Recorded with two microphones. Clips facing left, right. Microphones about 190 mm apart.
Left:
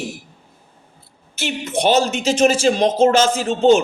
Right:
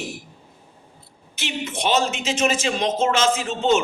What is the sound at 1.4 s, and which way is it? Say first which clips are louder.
A man's voice: left 6 dB; 40° left (ahead or behind).